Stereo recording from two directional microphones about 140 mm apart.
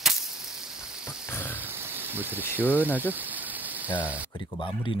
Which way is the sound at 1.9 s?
15° right (ahead or behind).